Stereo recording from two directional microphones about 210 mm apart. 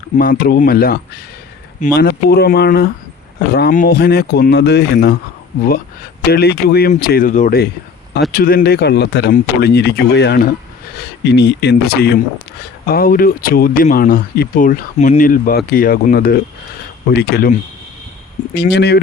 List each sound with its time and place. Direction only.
0.2 s speech: 45° left (ahead or behind)
2.0 s speech: 50° left (ahead or behind)
6.3 s speech: 50° left (ahead or behind)
18.5 s speech: 50° left (ahead or behind)